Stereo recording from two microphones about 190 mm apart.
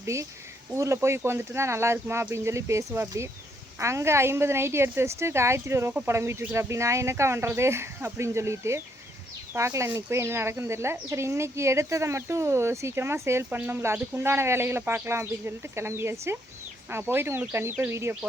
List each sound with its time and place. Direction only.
0.0 s speech: 15° right (ahead or behind)